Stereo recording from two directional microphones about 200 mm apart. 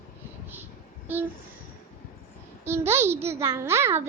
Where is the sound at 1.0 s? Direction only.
10° right (ahead or behind).